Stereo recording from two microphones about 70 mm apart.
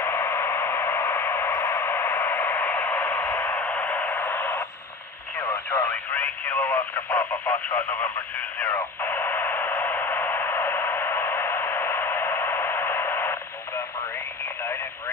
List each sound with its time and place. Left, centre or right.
0.0 s radio: left
3.5 s radio: left
5.4 s radio: left
6.1 s radio: left